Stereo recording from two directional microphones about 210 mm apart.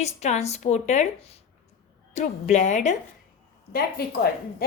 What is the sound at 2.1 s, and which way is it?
Speech, 35° left (ahead or behind).